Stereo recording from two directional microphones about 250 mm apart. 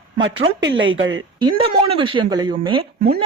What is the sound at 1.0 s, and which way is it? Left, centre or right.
Speech, right.